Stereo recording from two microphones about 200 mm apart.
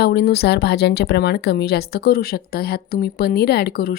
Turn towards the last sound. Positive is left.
turn(degrees=50)  # may be behind; listen again after turning